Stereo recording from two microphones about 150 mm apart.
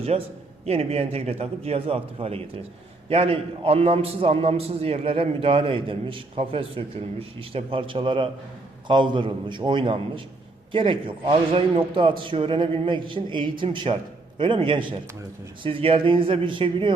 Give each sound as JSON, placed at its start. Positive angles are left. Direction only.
{"t": 0.1, "sound": "a man's voice", "side_deg": -45}